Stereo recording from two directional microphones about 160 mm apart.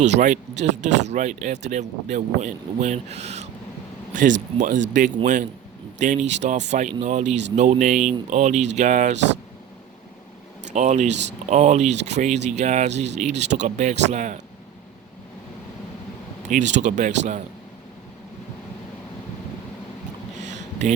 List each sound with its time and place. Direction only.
0.0 s speech: 50° right (ahead or behind)
10.7 s speech: 50° right (ahead or behind)
16.5 s speech: 50° right (ahead or behind)
20.5 s a sound: 50° right (ahead or behind)